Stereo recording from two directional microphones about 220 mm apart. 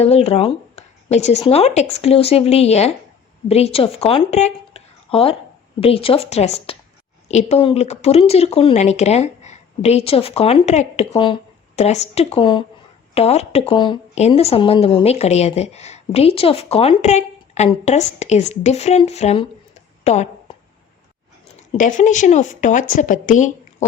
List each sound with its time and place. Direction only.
0.0 s speech: 30° left (ahead or behind)
20.1 s a sound: 30° left (ahead or behind)
21.5 s a woman's voice: 35° left (ahead or behind)